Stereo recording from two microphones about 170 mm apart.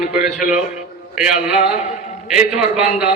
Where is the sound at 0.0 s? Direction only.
5° right (ahead or behind).